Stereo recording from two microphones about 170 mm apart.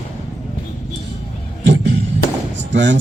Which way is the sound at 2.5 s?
90° right.